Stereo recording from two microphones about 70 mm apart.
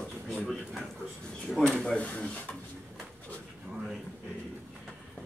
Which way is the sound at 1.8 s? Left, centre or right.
Centre.